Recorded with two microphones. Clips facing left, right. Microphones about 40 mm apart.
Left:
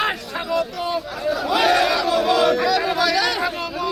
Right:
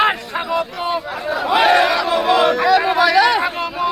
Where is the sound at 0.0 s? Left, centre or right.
Right.